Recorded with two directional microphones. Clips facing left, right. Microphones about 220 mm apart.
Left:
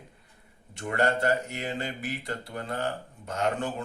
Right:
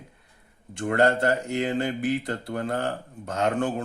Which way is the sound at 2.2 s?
50° right (ahead or behind).